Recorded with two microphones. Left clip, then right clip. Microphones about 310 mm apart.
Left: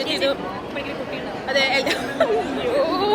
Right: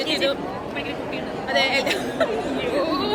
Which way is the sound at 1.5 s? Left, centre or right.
Centre.